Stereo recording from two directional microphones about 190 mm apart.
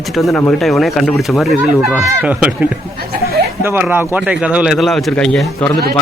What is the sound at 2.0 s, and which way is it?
Speech, 10° right (ahead or behind).